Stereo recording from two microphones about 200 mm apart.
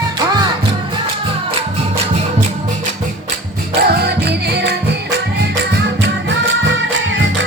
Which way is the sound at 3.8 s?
50° right (ahead or behind).